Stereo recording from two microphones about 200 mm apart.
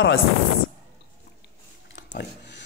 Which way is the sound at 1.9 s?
60° left (ahead or behind).